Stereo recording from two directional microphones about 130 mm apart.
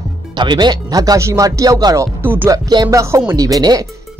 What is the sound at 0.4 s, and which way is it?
Speech, 35° right (ahead or behind).